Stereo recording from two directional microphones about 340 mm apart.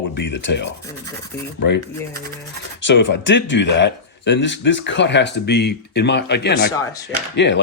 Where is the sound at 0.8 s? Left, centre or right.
Centre.